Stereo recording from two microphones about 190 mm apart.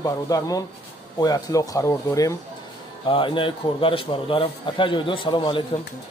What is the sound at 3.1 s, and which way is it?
A man's voice, 25° left (ahead or behind).